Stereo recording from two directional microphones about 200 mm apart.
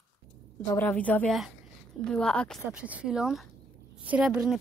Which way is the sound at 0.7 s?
10° left (ahead or behind).